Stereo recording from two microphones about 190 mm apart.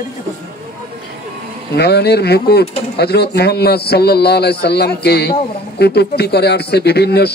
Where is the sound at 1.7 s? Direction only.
60° left (ahead or behind).